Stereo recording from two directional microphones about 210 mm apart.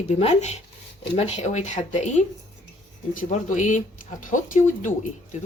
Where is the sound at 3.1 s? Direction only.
40° left (ahead or behind).